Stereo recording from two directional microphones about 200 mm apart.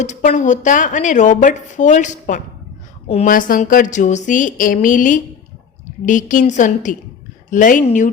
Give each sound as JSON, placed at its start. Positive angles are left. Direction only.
{"t": 0.0, "sound": "a woman's voice", "side_deg": 40}